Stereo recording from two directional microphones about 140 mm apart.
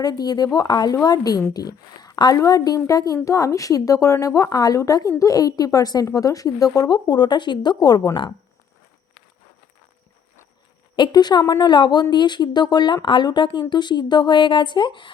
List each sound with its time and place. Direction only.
0.0 s a woman's voice: 30° left (ahead or behind)
10.9 s speech: 30° left (ahead or behind)